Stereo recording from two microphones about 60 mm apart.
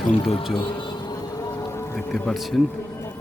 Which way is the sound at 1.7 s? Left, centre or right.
Left.